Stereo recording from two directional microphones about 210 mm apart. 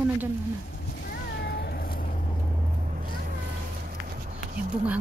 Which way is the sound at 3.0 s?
45° right (ahead or behind).